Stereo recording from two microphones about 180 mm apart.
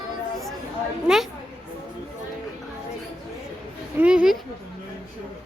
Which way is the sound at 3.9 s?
5° right (ahead or behind).